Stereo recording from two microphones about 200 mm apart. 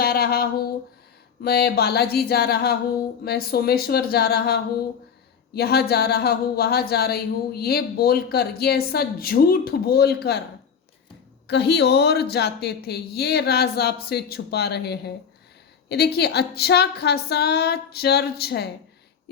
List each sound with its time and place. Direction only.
0.0 s a sound: 50° left (ahead or behind)
1.4 s speech: 50° left (ahead or behind)
11.4 s speech: 60° left (ahead or behind)